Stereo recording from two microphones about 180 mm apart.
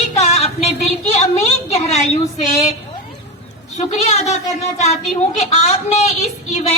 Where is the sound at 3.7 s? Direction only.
35° left (ahead or behind).